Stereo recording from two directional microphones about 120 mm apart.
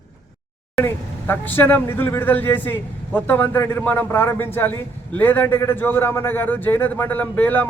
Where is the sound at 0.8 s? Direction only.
20° left (ahead or behind).